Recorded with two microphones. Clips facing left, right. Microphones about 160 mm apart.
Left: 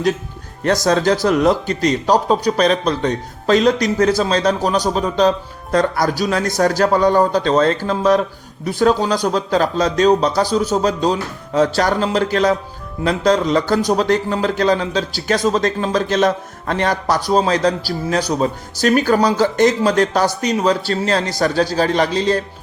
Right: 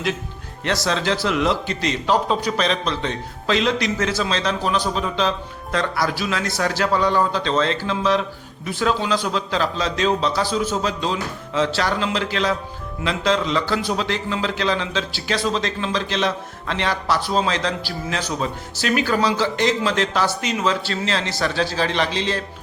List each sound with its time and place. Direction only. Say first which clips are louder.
0.6 s a man's voice: left 7 dB; 45° left (ahead or behind)